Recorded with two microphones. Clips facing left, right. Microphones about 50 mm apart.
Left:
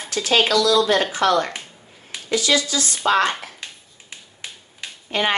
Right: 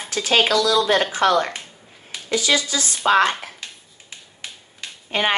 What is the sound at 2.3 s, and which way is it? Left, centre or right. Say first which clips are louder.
Speech: left 1 dB; right.